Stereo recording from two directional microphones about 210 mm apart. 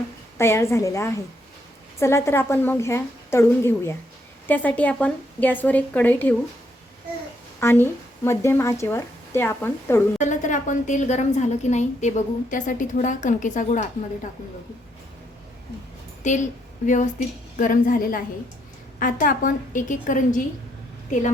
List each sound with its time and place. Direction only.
0.3 s a woman's voice: 10° left (ahead or behind)
7.6 s a woman's voice: 10° left (ahead or behind)
10.2 s a woman's voice: 35° left (ahead or behind)
16.2 s a woman's voice: 35° left (ahead or behind)